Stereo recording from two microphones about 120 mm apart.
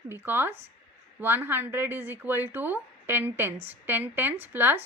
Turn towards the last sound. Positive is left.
turn(degrees=-15)  # may be behind; listen again after turning